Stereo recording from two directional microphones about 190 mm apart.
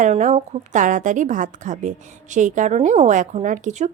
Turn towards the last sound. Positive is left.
turn(degrees=-40)  # may be behind; listen again after turning